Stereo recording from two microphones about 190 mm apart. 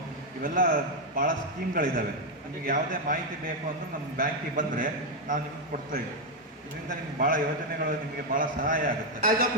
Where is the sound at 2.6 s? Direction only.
45° right (ahead or behind).